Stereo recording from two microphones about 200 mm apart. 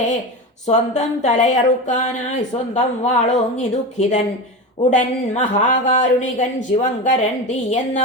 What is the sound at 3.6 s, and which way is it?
Speech, 35° left (ahead or behind).